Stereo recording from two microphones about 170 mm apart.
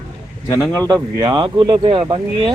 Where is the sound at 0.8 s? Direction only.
20° right (ahead or behind).